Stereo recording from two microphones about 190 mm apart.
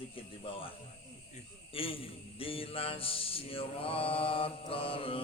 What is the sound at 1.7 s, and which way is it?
Mantra, 30° left (ahead or behind).